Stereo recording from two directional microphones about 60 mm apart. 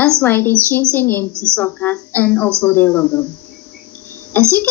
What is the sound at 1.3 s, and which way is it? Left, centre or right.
Speech, right.